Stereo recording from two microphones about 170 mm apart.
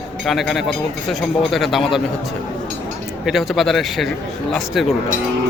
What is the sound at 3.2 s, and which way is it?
A man's voice, centre (ahead or behind).